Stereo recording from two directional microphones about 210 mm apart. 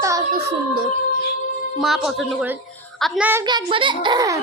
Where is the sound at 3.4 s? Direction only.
20° right (ahead or behind).